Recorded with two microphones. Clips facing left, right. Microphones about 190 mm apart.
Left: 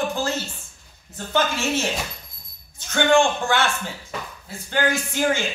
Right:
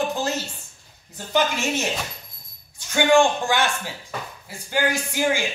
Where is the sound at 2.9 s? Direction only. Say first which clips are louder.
Right 1 dB; 15° right (ahead or behind).